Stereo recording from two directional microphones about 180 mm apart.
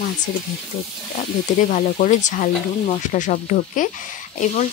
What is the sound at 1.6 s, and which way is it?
Speech, 45° left (ahead or behind).